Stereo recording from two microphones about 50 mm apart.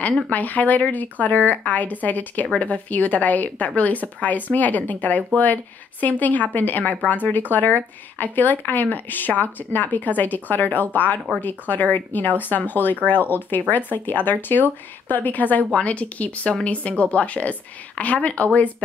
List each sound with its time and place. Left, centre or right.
0.3 s speech: left